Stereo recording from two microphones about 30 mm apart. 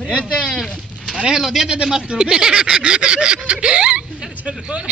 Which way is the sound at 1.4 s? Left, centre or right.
Centre.